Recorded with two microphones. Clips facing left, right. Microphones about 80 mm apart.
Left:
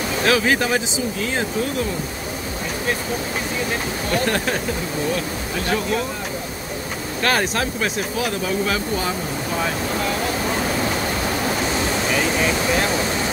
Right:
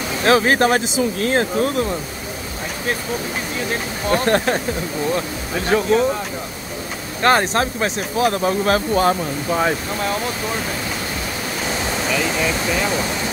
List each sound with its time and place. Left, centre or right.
0.2 s speech: right
4.1 s speech: right
5.7 s speech: right
7.2 s speech: right